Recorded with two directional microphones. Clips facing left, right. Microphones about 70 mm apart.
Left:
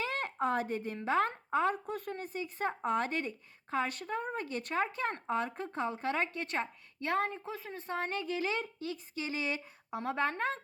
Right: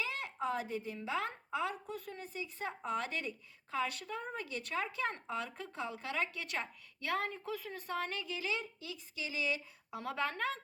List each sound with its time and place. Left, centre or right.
0.0 s speech: left